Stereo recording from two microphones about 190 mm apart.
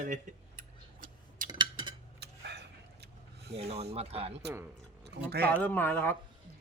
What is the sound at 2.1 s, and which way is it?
Vehicle, 60° right (ahead or behind).